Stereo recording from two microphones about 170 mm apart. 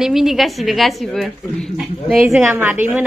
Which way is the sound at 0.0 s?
Centre (ahead or behind).